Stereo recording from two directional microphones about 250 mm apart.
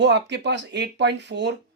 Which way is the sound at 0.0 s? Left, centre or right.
Right.